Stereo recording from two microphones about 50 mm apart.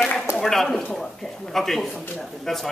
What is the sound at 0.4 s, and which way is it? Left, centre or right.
Speech, centre.